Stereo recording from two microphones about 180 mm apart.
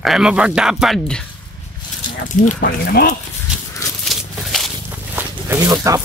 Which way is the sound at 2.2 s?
55° left (ahead or behind).